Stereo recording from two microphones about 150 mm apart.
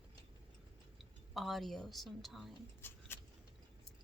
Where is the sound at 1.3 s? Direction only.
Centre (ahead or behind).